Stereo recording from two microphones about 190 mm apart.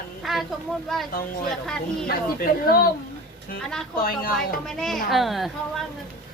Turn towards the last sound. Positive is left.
turn(degrees=0)  # may be behind; listen again after turning